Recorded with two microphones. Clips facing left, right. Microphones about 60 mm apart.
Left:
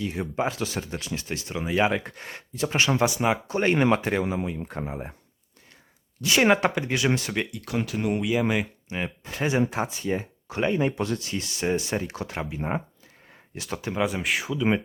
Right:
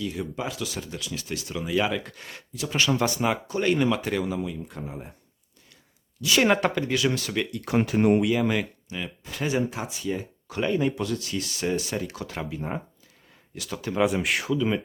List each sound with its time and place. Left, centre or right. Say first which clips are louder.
0.0 s speech: left 3 dB; left
4.6 s speech: left 4 dB; left
4.9 s speech: left 4 dB; left
6.2 s speech: left 1 dB; left
6.5 s speech: left 1 dB; centre
6.8 s speech: even; left
7.7 s speech: right 7 dB; right
8.2 s speech: right 1 dB; centre
8.9 s speech: left 3 dB; left
13.9 s speech: right 3 dB; centre